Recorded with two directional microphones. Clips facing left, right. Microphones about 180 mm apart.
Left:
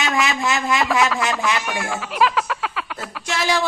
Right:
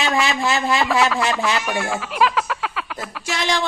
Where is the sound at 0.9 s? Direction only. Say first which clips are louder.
Right 1 dB; centre (ahead or behind).